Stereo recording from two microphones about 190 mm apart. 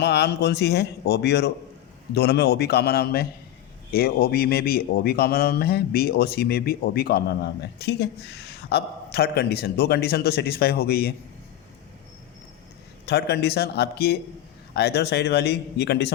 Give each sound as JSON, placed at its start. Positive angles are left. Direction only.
{"t": 0.0, "sound": "speech", "side_deg": 60}
{"t": 13.1, "sound": "speech", "side_deg": 60}